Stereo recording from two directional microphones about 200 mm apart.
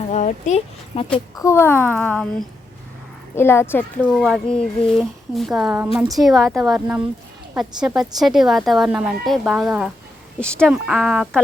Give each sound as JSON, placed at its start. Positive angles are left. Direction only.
{"t": 0.1, "sound": "speech", "side_deg": 35}
{"t": 1.4, "sound": "speech", "side_deg": 15}
{"t": 3.3, "sound": "a woman's voice", "side_deg": 10}